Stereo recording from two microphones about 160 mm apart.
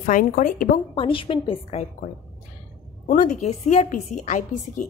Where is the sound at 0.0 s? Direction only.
55° left (ahead or behind).